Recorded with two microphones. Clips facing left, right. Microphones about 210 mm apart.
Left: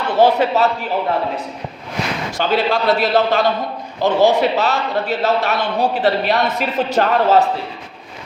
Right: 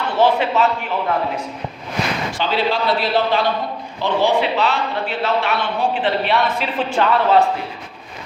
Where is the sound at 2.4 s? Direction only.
50° left (ahead or behind).